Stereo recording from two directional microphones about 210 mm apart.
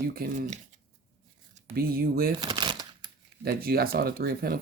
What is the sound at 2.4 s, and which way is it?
Crumpling, 20° right (ahead or behind).